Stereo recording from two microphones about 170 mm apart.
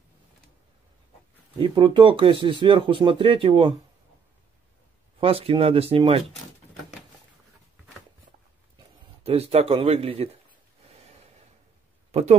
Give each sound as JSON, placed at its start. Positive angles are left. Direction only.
{"t": 1.6, "sound": "speech", "side_deg": -30}
{"t": 5.2, "sound": "speech", "side_deg": -35}
{"t": 9.2, "sound": "speech", "side_deg": -35}
{"t": 12.1, "sound": "a sound", "side_deg": -40}